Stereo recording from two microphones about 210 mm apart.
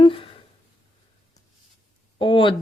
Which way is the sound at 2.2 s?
25° left (ahead or behind).